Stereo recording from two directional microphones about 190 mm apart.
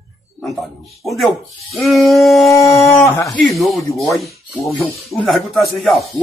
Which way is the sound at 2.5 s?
15° left (ahead or behind).